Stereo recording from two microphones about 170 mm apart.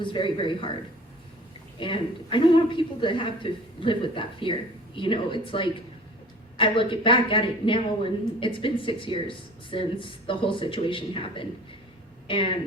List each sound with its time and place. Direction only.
0.0 s a woman's voice: 30° left (ahead or behind)
1.8 s a woman's voice: 30° left (ahead or behind)